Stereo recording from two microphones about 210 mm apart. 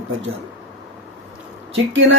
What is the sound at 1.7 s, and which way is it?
Speech, 65° right (ahead or behind).